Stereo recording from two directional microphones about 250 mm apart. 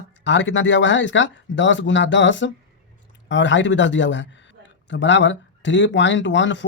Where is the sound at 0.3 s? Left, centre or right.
Left.